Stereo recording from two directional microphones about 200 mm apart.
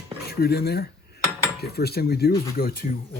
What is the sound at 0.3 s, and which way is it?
Dishes, 50° left (ahead or behind).